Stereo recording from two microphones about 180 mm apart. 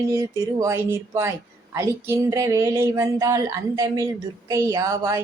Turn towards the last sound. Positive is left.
turn(degrees=-15)  # may be behind; listen again after turning